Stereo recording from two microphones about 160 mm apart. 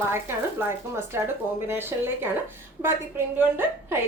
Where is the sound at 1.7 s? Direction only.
15° right (ahead or behind).